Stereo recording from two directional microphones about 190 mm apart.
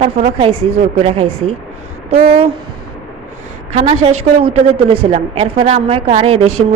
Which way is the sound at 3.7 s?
30° right (ahead or behind).